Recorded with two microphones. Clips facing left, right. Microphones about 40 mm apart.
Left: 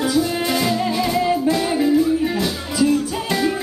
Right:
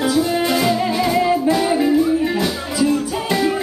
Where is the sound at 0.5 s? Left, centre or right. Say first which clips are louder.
Right 2 dB; centre.